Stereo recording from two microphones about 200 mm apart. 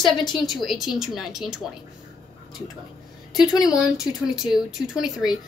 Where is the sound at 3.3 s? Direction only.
5° right (ahead or behind).